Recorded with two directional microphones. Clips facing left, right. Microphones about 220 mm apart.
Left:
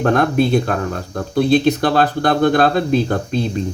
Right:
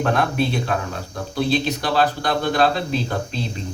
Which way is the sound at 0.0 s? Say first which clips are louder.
Left 5 dB; 45° left (ahead or behind).